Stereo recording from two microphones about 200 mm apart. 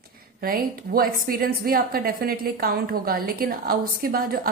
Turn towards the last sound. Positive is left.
turn(degrees=-45)  # may be behind; listen again after turning